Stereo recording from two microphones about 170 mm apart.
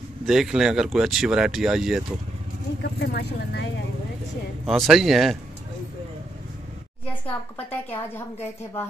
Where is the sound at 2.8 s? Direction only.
75° left (ahead or behind).